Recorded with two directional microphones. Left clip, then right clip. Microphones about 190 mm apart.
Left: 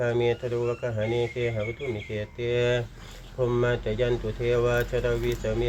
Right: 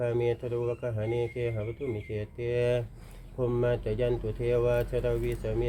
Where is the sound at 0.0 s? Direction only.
45° right (ahead or behind).